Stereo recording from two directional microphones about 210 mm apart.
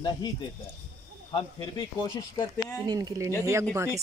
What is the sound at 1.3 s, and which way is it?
Speech, 20° left (ahead or behind).